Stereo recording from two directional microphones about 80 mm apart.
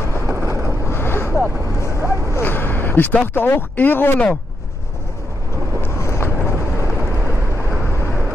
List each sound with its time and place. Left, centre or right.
0.3 s vehicle: right
0.8 s vehicle: left
2.4 s a sound: left
3.3 s speech: left
5.8 s vehicle: left